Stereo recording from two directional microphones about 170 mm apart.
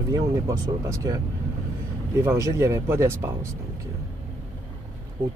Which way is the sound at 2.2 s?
15° right (ahead or behind).